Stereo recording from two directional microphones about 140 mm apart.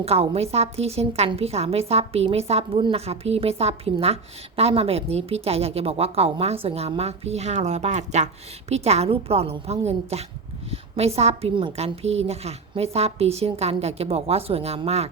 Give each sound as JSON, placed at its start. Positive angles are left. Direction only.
{"t": 0.0, "sound": "a woman's voice", "side_deg": -45}